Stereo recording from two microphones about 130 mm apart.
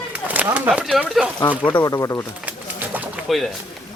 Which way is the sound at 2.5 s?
15° right (ahead or behind).